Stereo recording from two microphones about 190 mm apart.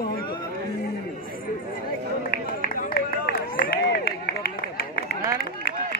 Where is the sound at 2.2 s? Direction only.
50° left (ahead or behind).